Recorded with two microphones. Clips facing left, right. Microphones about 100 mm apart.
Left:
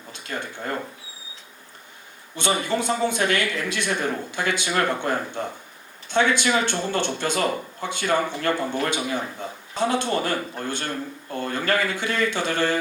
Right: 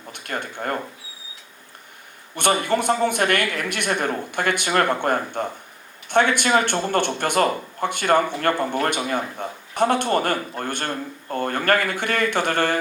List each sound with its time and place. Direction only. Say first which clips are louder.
0.1 s a sound: right 2 dB; 60° right (ahead or behind)
0.4 s speech: right 4 dB; 55° right (ahead or behind)
2.3 s a man's voice: right 3 dB; 60° right (ahead or behind)